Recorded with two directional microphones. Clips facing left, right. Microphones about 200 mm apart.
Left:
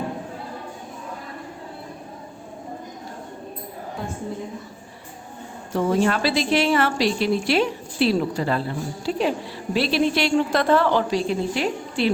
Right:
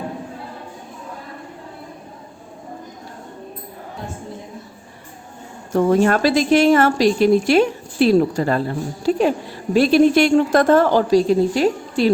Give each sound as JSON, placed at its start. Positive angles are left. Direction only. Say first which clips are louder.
{"t": 5.7, "sound": "a woman's voice", "louder": "right 5 dB", "side_deg": -50}